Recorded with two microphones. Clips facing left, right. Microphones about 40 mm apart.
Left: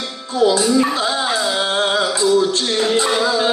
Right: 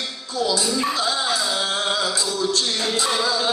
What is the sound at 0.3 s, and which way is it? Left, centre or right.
Speech, left.